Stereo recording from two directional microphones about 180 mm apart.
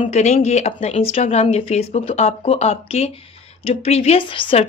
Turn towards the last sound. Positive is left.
turn(degrees=30)  # may be behind; listen again after turning